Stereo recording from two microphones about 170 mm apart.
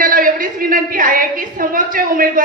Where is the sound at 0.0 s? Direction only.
55° right (ahead or behind).